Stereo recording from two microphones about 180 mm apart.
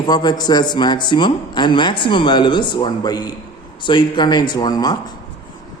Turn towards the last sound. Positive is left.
turn(degrees=20)  # may be behind; listen again after turning